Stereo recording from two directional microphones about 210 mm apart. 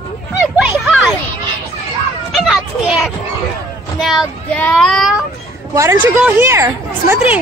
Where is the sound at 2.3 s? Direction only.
Centre (ahead or behind).